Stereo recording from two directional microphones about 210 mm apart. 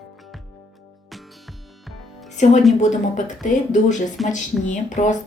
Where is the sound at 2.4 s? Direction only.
35° left (ahead or behind).